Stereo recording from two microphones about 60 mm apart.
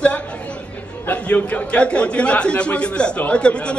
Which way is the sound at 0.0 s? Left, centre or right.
Left.